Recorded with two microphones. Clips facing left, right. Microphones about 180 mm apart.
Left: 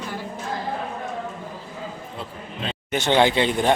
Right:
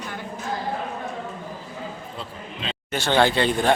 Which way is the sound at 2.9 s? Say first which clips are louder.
Left 1 dB; 20° left (ahead or behind).